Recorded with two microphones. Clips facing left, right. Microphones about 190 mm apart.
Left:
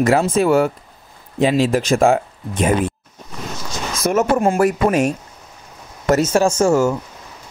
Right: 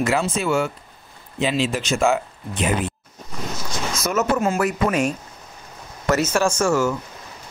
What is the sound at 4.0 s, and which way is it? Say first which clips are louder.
Speech: left 5 dB; 50° left (ahead or behind).